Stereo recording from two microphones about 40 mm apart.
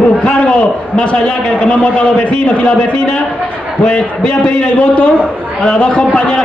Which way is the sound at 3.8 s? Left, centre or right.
Left.